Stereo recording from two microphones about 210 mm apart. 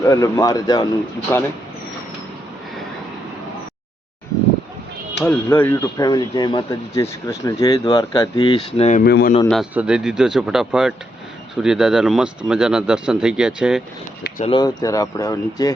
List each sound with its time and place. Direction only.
0.0 s speech: 15° left (ahead or behind)
5.2 s speech: 10° left (ahead or behind); by 9.0 s 35° left (ahead or behind)
9.0 s a man's voice: 50° left (ahead or behind)
9.5 s speech: 5° right (ahead or behind)
14.4 s speech: 20° left (ahead or behind)